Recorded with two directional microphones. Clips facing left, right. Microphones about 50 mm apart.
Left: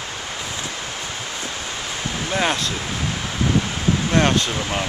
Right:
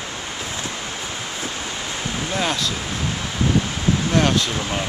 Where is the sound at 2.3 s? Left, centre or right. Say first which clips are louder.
Left 3 dB; left.